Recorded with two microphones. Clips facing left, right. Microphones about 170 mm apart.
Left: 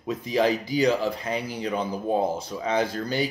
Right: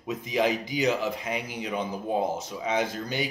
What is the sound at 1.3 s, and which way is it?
Speech, 35° left (ahead or behind).